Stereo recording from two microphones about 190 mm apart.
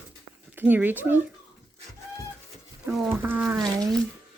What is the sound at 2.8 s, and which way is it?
Speech, 5° right (ahead or behind).